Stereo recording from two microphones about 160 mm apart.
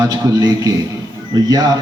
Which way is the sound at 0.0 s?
25° right (ahead or behind).